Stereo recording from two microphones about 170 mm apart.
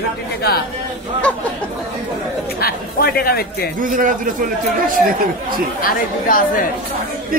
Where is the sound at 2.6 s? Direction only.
65° left (ahead or behind).